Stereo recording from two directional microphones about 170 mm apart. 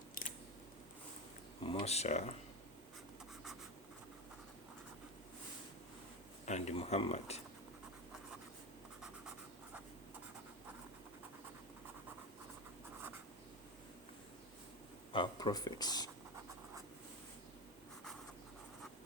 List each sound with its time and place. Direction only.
1.6 s speech: 35° left (ahead or behind)
6.4 s speech: 40° left (ahead or behind)
15.1 s speech: 25° left (ahead or behind)